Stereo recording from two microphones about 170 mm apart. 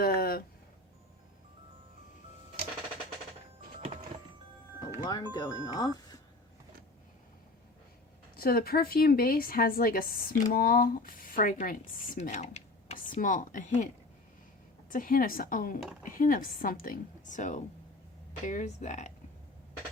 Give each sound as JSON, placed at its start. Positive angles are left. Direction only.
{"t": 0.0, "sound": "a sound", "side_deg": 60}
{"t": 4.9, "sound": "speech", "side_deg": 20}
{"t": 8.4, "sound": "speech", "side_deg": 60}
{"t": 14.8, "sound": "a woman's voice", "side_deg": 55}